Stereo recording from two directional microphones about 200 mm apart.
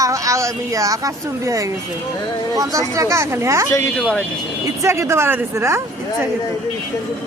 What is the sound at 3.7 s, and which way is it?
Speech, 15° left (ahead or behind).